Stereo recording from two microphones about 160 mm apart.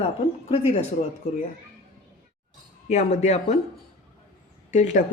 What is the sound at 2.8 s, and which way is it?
Speech, 45° left (ahead or behind).